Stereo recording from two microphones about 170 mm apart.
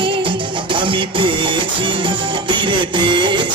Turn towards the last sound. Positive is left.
turn(degrees=-30)  # may be behind; listen again after turning